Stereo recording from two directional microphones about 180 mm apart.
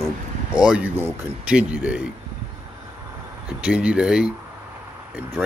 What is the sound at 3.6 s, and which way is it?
Speech, 5° right (ahead or behind).